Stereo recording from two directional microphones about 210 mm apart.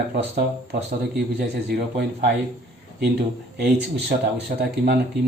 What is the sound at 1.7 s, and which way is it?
Speech, 50° right (ahead or behind).